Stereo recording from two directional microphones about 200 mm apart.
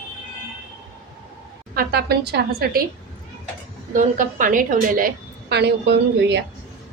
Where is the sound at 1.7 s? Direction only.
50° right (ahead or behind).